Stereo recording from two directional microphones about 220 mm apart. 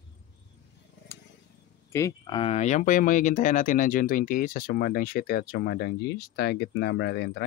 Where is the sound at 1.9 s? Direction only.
15° left (ahead or behind); by 7.4 s 50° left (ahead or behind).